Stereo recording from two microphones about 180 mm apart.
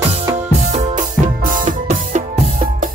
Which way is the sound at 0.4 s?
40° right (ahead or behind).